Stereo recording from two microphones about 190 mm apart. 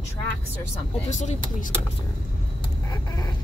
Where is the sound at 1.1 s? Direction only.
40° left (ahead or behind).